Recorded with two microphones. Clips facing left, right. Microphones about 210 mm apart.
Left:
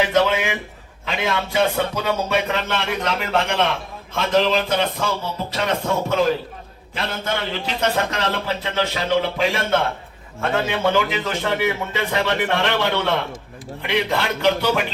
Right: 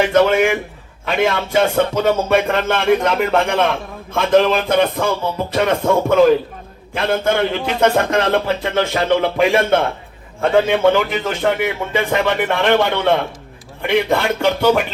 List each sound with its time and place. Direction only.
0.0 s a sound: 50° right (ahead or behind)
1.0 s a man's voice: 50° right (ahead or behind)
4.1 s music: 55° right (ahead or behind)
6.9 s a man's voice: 55° right (ahead or behind)
10.9 s a man's voice: 55° right (ahead or behind)